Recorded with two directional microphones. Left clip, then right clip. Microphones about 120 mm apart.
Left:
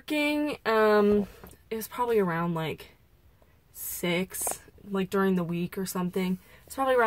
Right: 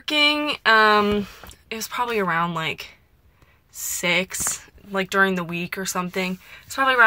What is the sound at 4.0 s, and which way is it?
A woman's voice, 30° left (ahead or behind).